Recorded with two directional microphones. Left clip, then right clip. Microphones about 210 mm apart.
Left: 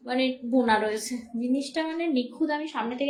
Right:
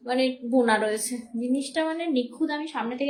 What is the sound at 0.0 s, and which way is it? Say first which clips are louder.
A woman's voice: right 2 dB; 20° right (ahead or behind).